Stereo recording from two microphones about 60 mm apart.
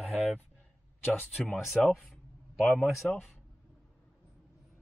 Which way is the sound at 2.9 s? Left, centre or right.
Centre.